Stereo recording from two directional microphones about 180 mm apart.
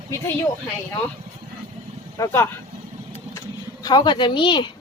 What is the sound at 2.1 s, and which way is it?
Speech, 15° left (ahead or behind).